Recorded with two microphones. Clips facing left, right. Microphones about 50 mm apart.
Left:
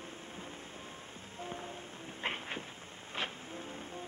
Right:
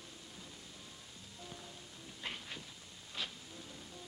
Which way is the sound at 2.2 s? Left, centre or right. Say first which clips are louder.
Left 7 dB; left.